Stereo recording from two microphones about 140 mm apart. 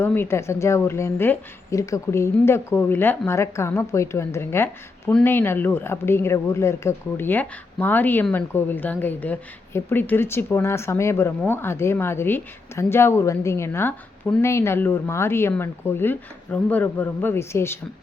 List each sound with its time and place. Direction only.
0.0 s a woman's voice: 15° left (ahead or behind)